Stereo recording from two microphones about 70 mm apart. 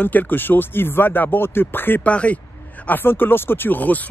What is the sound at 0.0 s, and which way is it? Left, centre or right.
Speech, left.